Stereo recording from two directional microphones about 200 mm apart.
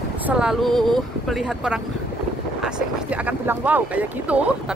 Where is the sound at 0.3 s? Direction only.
5° right (ahead or behind).